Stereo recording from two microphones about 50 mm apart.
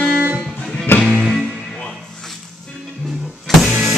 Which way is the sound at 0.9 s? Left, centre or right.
Left.